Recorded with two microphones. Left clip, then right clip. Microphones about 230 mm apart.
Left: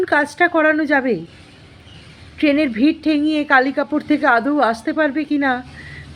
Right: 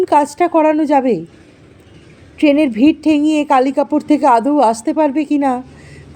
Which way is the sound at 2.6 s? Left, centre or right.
Right.